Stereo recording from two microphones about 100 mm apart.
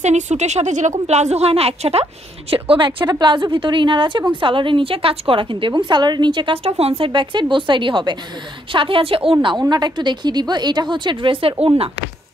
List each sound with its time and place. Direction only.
0.3 s a woman's voice: 90° right
2.5 s a woman's voice: 60° right (ahead or behind)
3.1 s a woman's voice: 50° right (ahead or behind); by 7.1 s 85° right
7.1 s a woman's voice: 55° right (ahead or behind)
11.6 s speech: 70° right (ahead or behind)